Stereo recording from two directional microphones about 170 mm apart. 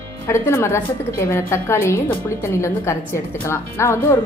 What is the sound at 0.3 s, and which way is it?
A woman's voice, 15° left (ahead or behind).